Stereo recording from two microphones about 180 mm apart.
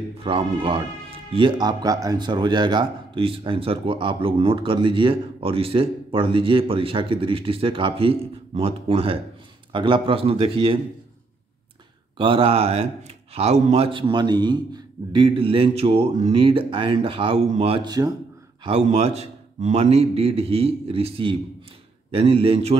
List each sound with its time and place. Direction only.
0.2 s a man's voice: 30° right (ahead or behind)
12.2 s a man's voice: 30° right (ahead or behind)
18.6 s speech: 35° right (ahead or behind)